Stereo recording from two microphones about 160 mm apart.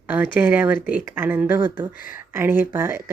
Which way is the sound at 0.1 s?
10° right (ahead or behind).